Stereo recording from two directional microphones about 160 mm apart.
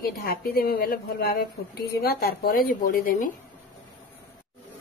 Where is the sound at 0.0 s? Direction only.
70° left (ahead or behind).